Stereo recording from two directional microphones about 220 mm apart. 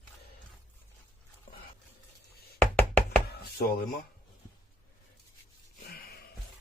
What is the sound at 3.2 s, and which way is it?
Chopping, 45° left (ahead or behind).